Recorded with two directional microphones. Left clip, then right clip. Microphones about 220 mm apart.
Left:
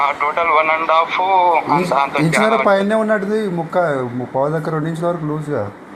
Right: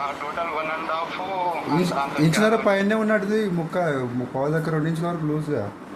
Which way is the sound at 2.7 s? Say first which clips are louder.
Left 6 dB; 10° left (ahead or behind).